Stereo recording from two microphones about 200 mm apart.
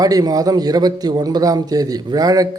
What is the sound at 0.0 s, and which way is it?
A man's voice, 20° right (ahead or behind).